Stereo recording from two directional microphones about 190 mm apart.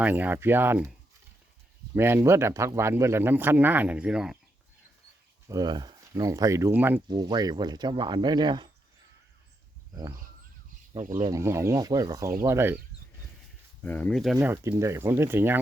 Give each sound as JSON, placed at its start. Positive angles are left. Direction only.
{"t": 0.0, "sound": "speech", "side_deg": -10}
{"t": 2.0, "sound": "speech", "side_deg": -10}
{"t": 5.5, "sound": "speech", "side_deg": -20}
{"t": 7.1, "sound": "speech", "side_deg": -20}
{"t": 10.9, "sound": "speech", "side_deg": -40}
{"t": 11.2, "sound": "speech", "side_deg": -15}
{"t": 13.8, "sound": "speech", "side_deg": 10}
{"t": 14.3, "sound": "speech", "side_deg": -10}